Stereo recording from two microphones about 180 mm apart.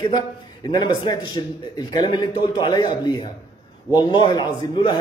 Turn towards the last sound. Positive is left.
turn(degrees=25)  # may be behind; listen again after turning